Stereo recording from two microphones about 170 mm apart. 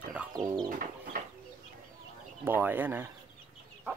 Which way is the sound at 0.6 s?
55° right (ahead or behind).